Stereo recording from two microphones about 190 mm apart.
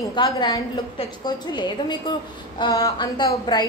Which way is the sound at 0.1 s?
25° left (ahead or behind).